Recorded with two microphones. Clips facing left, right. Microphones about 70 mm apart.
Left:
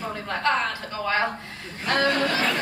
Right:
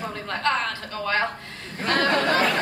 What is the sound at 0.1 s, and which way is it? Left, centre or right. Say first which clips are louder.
Speech: left 1 dB; centre.